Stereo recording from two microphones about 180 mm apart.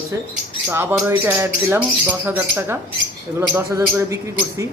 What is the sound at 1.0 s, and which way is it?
A man's voice, 10° right (ahead or behind).